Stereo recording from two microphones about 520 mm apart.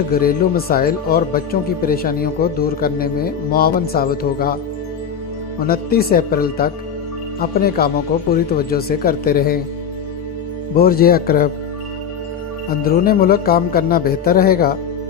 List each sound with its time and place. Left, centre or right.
0.1 s speech: centre
5.5 s speech: centre
10.8 s speech: centre
12.7 s speech: centre